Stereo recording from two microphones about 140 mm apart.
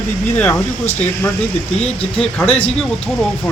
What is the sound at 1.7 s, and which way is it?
Speech, 50° left (ahead or behind).